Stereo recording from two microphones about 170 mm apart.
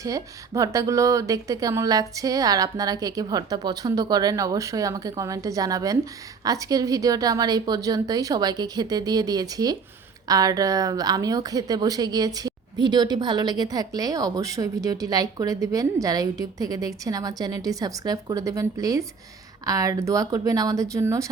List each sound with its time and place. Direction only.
0.0 s a woman's voice: 20° right (ahead or behind)